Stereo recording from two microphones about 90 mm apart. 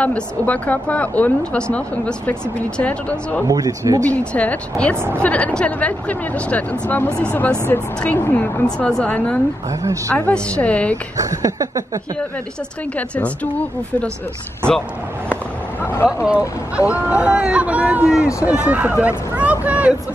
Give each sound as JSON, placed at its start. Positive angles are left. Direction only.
{"t": 0.0, "sound": "a woman's voice", "side_deg": 15}
{"t": 3.4, "sound": "speech", "side_deg": -45}
{"t": 4.0, "sound": "a woman's voice", "side_deg": 15}
{"t": 4.9, "sound": "speech", "side_deg": -25}
{"t": 5.2, "sound": "a woman's voice", "side_deg": 15}
{"t": 7.1, "sound": "speech", "side_deg": -25}
{"t": 8.0, "sound": "a woman's voice", "side_deg": 15}
{"t": 9.7, "sound": "a sound", "side_deg": -35}
{"t": 10.3, "sound": "a woman's voice", "side_deg": 15}
{"t": 11.1, "sound": "a sound", "side_deg": -40}
{"t": 12.9, "sound": "a woman's voice", "side_deg": 15}
{"t": 15.8, "sound": "speech", "side_deg": 25}
{"t": 16.3, "sound": "speech", "side_deg": -15}